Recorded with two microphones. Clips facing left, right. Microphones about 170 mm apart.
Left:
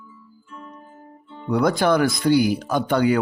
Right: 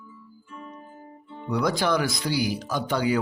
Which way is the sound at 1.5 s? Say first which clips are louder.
Left 5 dB; 55° left (ahead or behind).